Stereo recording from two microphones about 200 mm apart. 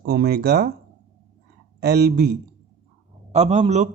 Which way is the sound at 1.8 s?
55° right (ahead or behind).